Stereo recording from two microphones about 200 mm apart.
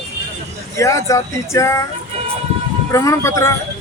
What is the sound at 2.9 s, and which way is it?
Speech, 15° left (ahead or behind).